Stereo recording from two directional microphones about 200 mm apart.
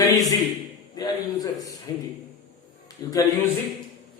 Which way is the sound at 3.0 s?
20° left (ahead or behind).